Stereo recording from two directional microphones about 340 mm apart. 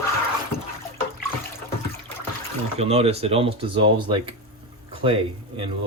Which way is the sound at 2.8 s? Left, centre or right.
Centre.